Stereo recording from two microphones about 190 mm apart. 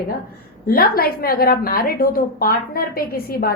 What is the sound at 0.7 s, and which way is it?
A woman's voice, 50° left (ahead or behind).